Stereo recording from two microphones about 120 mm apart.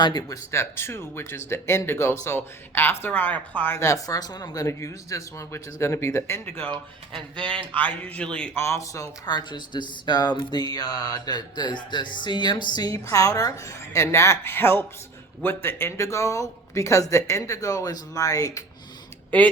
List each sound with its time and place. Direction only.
0.0 s speech: 35° left (ahead or behind)
6.7 s speech: 40° right (ahead or behind)
7.8 s speech: 15° left (ahead or behind)
8.5 s speech: 20° left (ahead or behind)
19.3 s speech: 10° left (ahead or behind)